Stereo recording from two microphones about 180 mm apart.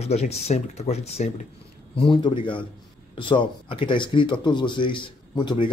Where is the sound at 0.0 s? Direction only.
35° left (ahead or behind).